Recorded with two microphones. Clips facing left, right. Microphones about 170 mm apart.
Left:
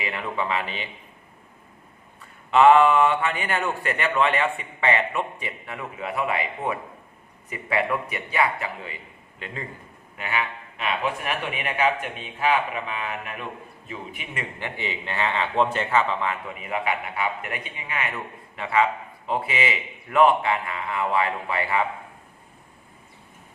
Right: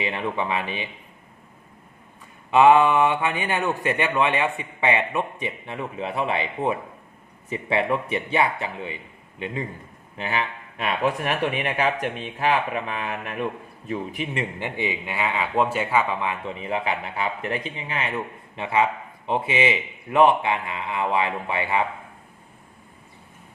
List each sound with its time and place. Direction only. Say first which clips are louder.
0.0 s a man's voice: right 2 dB; 20° right (ahead or behind)
2.5 s a man's voice: even; 15° right (ahead or behind)
10.2 s speech: right 1 dB; 35° right (ahead or behind)
14.6 s a man's voice: right 4 dB; 15° right (ahead or behind)
16.6 s a man's voice: right 1 dB; 30° right (ahead or behind)